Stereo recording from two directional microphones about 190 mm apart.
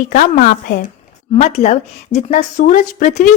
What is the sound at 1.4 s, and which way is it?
Speech, 35° left (ahead or behind).